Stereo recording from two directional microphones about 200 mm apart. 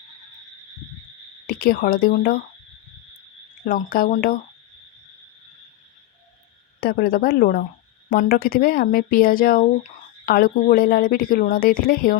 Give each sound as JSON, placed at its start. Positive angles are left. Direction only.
{"t": 1.5, "sound": "a woman's voice", "side_deg": 50}
{"t": 3.7, "sound": "a woman's voice", "side_deg": 45}
{"t": 6.7, "sound": "a woman's voice", "side_deg": 50}